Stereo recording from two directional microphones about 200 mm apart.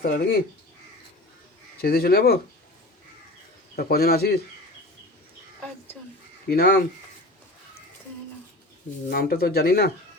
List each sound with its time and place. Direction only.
0.0 s speech: 50° left (ahead or behind)
1.8 s speech: 50° left (ahead or behind)
3.8 s speech: 50° left (ahead or behind)
6.5 s speech: 50° left (ahead or behind)
9.0 s speech: 50° left (ahead or behind)